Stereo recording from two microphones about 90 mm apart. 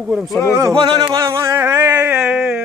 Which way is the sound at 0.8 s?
50° right (ahead or behind).